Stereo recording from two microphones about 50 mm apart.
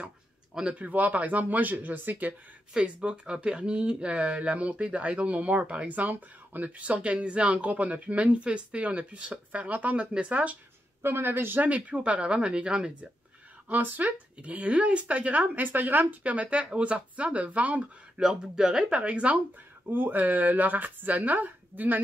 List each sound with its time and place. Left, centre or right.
0.7 s speech: right
2.8 s speech: right
11.0 s speech: right
11.7 s speech: right
13.7 s speech: right
19.9 s speech: right